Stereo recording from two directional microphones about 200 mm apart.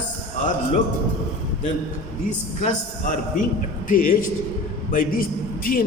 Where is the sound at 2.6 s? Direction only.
40° left (ahead or behind).